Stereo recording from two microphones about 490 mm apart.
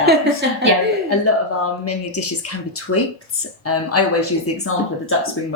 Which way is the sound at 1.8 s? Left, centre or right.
Left.